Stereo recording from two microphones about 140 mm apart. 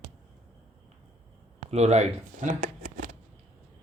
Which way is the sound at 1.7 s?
50° right (ahead or behind).